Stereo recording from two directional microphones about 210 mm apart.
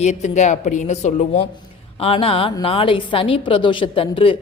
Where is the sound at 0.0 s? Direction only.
35° left (ahead or behind).